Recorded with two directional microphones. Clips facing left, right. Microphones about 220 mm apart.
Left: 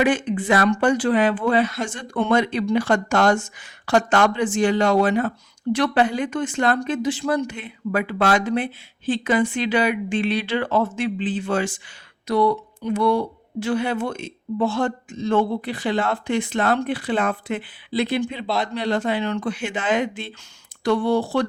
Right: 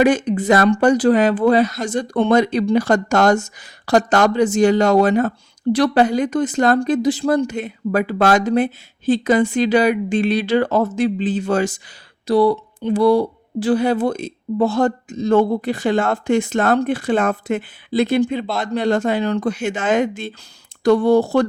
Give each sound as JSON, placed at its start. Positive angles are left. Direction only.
{"t": 0.0, "sound": "speech", "side_deg": -40}